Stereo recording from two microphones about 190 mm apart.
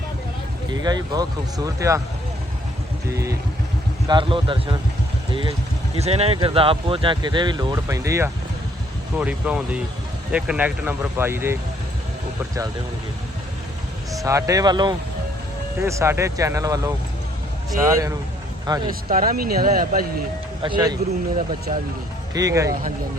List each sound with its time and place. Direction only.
0.7 s speech: 20° right (ahead or behind)
3.1 s speech: 15° right (ahead or behind)
4.1 s speech: 25° right (ahead or behind)
14.3 s speech: 15° right (ahead or behind)
19.0 s speech: 45° right (ahead or behind)
20.6 s speech: 25° right (ahead or behind)
21.7 s speech: 40° right (ahead or behind)
22.4 s speech: 15° right (ahead or behind)